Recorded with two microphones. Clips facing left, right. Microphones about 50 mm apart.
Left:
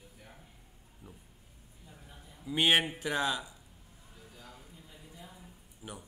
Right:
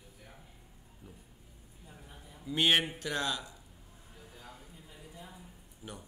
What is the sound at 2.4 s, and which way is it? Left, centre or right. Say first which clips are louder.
Speech: left 1 dB; centre.